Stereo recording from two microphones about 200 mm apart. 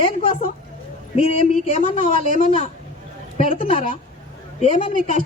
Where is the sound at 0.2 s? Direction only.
35° left (ahead or behind).